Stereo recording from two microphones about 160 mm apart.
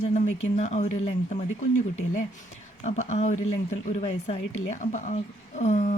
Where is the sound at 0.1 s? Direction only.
45° left (ahead or behind).